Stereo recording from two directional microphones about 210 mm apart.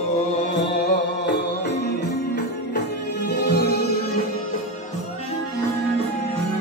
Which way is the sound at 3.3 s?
50° left (ahead or behind).